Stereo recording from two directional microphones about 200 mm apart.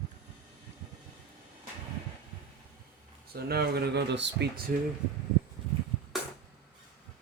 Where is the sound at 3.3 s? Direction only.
50° right (ahead or behind).